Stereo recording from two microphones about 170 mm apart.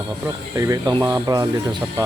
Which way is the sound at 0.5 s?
20° right (ahead or behind).